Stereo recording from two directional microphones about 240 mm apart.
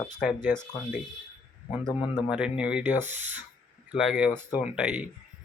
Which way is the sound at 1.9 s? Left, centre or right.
Centre.